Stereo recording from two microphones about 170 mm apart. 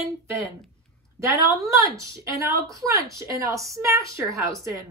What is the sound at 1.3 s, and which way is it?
A woman's voice, 20° right (ahead or behind).